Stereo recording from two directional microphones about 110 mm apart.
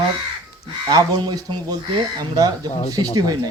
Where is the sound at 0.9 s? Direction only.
40° right (ahead or behind).